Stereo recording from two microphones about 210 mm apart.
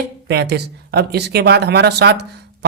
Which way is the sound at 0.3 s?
50° right (ahead or behind).